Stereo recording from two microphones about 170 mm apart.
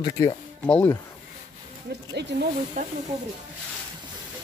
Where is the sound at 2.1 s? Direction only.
85° right.